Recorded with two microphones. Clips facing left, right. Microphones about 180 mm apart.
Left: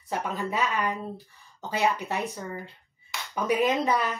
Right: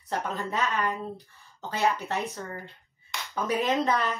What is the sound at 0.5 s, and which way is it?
Speech, 15° left (ahead or behind).